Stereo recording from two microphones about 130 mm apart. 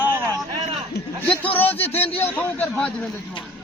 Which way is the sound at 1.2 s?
10° left (ahead or behind).